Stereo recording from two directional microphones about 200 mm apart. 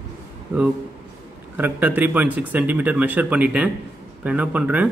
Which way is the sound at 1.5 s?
10° right (ahead or behind).